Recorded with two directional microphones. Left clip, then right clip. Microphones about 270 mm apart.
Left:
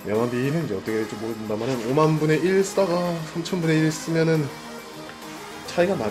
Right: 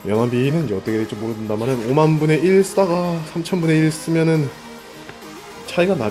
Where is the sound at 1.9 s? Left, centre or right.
Right.